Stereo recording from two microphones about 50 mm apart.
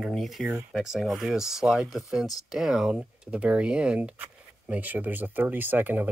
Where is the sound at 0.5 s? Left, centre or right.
Centre.